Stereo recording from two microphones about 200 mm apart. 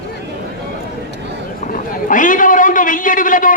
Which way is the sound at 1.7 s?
40° left (ahead or behind).